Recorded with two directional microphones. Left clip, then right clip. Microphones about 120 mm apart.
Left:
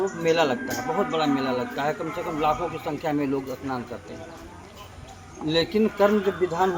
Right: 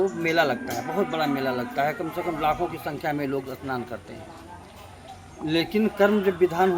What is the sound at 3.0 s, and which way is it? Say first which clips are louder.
Speech: left 1 dB; 50° right (ahead or behind).